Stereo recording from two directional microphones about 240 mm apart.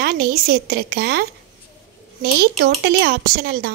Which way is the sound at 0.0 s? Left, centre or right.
Right.